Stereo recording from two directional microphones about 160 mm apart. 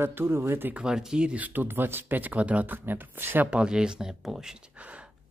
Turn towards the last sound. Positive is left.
turn(degrees=-10)  # may be behind; listen again after turning